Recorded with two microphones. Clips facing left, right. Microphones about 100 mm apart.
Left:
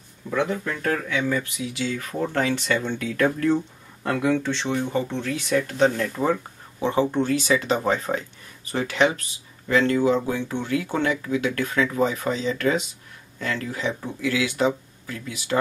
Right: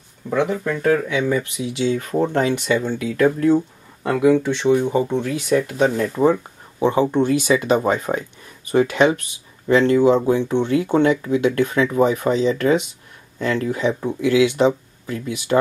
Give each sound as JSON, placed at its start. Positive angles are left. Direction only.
{"t": 0.3, "sound": "speech", "side_deg": -15}
{"t": 2.7, "sound": "speech", "side_deg": -5}